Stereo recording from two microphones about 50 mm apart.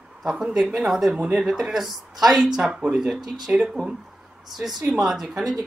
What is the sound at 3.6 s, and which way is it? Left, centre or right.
Speech, right.